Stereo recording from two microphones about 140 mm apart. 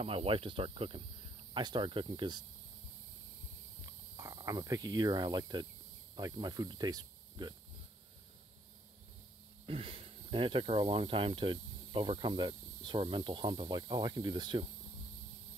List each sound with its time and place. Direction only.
0.0 s speech: 45° right (ahead or behind)
4.2 s speech: 25° right (ahead or behind)
9.7 s speech: 40° right (ahead or behind)